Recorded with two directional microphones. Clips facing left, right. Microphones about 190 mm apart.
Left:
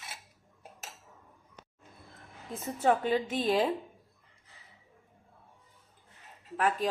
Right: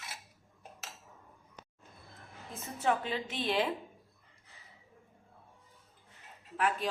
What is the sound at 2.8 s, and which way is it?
Speech, 45° left (ahead or behind).